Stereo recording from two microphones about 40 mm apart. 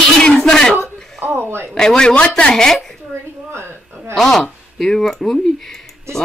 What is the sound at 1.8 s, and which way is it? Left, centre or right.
Speech, centre.